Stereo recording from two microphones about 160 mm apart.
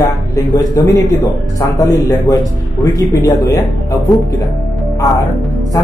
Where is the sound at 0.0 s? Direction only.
20° left (ahead or behind).